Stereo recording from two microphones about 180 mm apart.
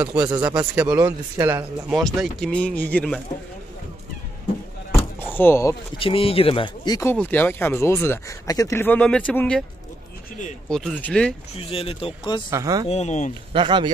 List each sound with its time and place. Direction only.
0.0 s speech: 5° right (ahead or behind)
0.3 s speech: 25° right (ahead or behind)
0.6 s speech: 5° right (ahead or behind)
2.0 s speech: centre (ahead or behind)
4.9 s a sound: 10° left (ahead or behind)
5.9 s speech: 30° left (ahead or behind); by 9.7 s 5° left (ahead or behind)
10.7 s speech: centre (ahead or behind)
11.7 s speech: 30° left (ahead or behind)
12.4 s speech: 20° right (ahead or behind)
12.8 s speech: 35° left (ahead or behind)
13.5 s speech: 30° right (ahead or behind)